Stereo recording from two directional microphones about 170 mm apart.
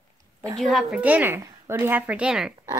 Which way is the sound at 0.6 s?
Centre (ahead or behind).